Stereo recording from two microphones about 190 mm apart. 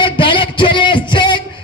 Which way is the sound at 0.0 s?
25° left (ahead or behind).